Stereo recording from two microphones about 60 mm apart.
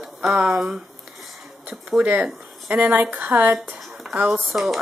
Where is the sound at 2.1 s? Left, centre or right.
Right.